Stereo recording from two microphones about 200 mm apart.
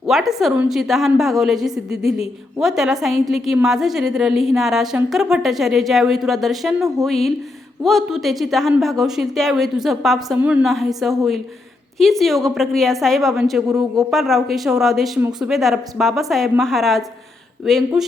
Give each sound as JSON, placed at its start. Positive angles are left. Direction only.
{"t": 0.1, "sound": "a woman's voice", "side_deg": 0}